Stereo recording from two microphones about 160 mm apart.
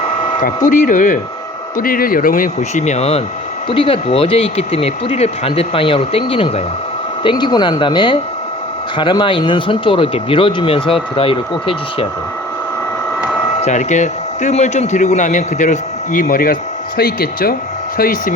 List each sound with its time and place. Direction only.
0.4 s speech: 50° left (ahead or behind); by 12.0 s 35° left (ahead or behind)
13.6 s speech: 50° left (ahead or behind)